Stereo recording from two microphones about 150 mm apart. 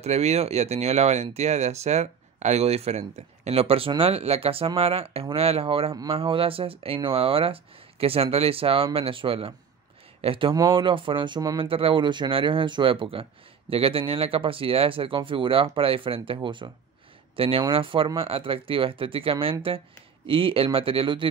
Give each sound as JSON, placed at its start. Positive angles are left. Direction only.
{"t": 0.0, "sound": "speech", "side_deg": -45}